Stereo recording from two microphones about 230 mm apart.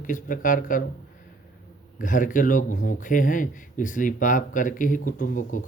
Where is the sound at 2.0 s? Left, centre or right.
Left.